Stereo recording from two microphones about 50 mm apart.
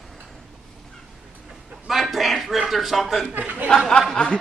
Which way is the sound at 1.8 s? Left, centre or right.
Centre.